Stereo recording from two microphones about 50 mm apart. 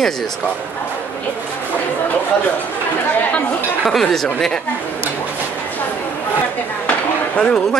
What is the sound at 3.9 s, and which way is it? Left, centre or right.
Speech, centre.